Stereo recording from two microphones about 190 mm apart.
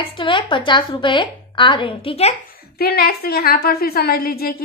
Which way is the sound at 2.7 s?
55° left (ahead or behind).